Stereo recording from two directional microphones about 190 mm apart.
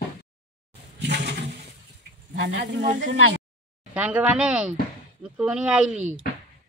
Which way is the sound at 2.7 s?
65° right (ahead or behind).